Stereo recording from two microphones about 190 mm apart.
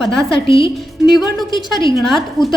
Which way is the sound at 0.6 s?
25° left (ahead or behind).